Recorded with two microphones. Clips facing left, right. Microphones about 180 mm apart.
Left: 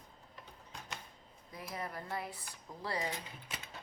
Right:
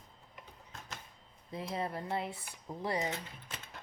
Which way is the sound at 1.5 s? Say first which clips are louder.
Right 6 dB; 25° right (ahead or behind).